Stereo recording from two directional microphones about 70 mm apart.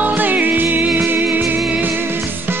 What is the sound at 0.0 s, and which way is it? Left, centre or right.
Music, right.